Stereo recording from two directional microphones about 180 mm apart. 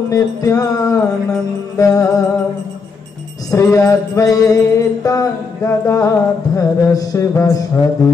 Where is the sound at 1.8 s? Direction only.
20° left (ahead or behind).